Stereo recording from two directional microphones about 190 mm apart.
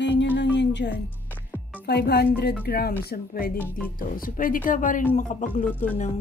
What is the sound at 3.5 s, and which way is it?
Speech, 5° left (ahead or behind).